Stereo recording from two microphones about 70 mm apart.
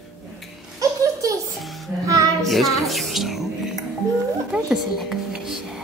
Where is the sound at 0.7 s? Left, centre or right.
Right.